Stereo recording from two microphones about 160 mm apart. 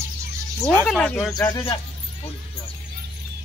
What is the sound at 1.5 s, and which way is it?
Speech, 35° left (ahead or behind).